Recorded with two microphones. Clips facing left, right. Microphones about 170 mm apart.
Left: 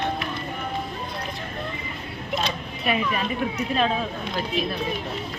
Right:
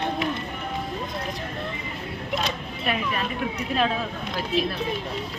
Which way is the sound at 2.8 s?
Centre (ahead or behind).